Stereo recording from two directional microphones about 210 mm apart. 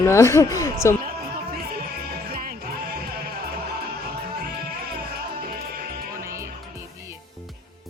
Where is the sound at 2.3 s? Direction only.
40° right (ahead or behind).